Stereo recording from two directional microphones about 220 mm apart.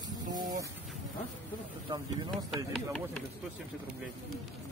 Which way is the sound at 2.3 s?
Centre (ahead or behind).